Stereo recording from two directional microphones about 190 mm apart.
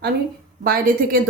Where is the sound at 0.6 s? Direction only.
50° right (ahead or behind).